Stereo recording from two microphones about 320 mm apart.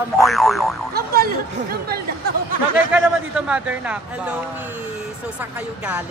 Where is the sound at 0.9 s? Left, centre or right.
Right.